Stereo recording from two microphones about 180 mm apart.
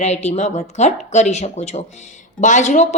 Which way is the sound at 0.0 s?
40° left (ahead or behind).